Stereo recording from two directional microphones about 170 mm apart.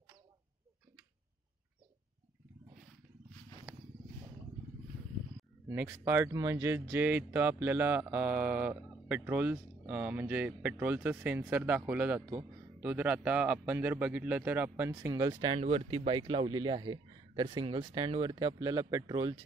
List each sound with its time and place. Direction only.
5.7 s speech: 15° right (ahead or behind)